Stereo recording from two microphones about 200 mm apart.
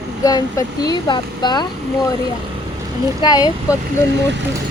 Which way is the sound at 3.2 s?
20° left (ahead or behind).